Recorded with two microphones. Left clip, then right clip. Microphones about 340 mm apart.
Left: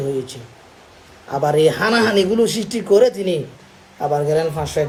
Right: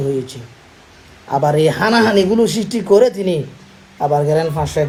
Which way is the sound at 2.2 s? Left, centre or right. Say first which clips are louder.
Right 2 dB; right.